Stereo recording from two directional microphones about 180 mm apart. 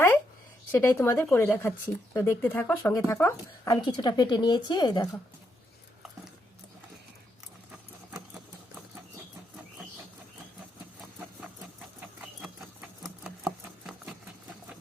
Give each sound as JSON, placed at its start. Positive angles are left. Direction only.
{"t": 0.7, "sound": "speech", "side_deg": 15}
{"t": 11.9, "sound": "rodents", "side_deg": -5}